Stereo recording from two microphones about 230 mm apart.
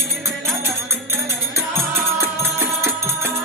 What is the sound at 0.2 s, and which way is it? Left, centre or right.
Music, centre.